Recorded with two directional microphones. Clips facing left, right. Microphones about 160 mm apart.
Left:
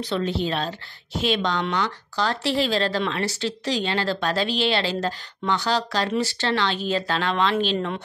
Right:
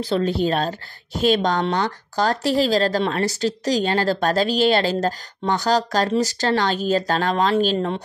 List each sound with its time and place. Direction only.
0.1 s a woman's voice: 40° right (ahead or behind)